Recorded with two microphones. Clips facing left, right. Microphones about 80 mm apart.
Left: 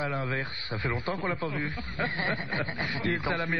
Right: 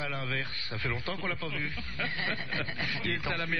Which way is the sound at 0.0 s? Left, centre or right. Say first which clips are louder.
Left 5 dB; left.